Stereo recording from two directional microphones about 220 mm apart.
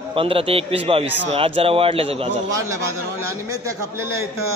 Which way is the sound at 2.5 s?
15° right (ahead or behind).